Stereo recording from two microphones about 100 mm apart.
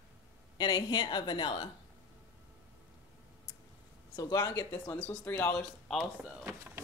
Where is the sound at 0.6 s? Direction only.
45° left (ahead or behind).